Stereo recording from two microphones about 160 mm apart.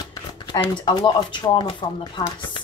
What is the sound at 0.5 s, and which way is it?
Speech, 30° left (ahead or behind).